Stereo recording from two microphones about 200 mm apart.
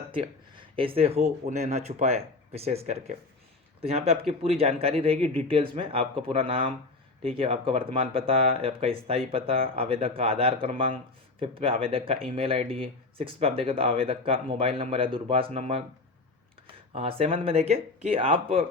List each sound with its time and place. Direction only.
0.1 s speech: 25° right (ahead or behind)